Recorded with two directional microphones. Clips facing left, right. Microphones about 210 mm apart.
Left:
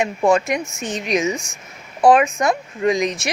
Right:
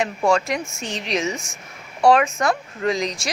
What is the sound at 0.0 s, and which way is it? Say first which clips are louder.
Speech: left 3 dB; 20° left (ahead or behind).